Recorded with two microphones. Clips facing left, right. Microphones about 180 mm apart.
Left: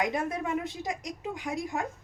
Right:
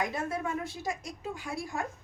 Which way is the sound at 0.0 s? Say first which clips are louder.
Left 3 dB; 20° left (ahead or behind).